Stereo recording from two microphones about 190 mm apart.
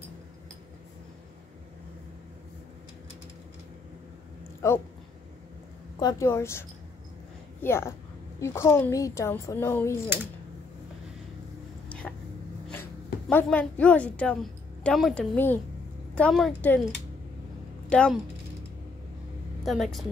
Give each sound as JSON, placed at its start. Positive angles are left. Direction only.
{"t": 4.6, "sound": "a child's voice", "side_deg": 15}
{"t": 5.9, "sound": "a child's voice", "side_deg": 20}
{"t": 7.6, "sound": "a child's voice", "side_deg": 15}
{"t": 12.0, "sound": "a sound", "side_deg": 5}
{"t": 13.3, "sound": "a woman's voice", "side_deg": 10}
{"t": 17.8, "sound": "a woman's voice", "side_deg": 5}
{"t": 19.6, "sound": "a woman's voice", "side_deg": 0}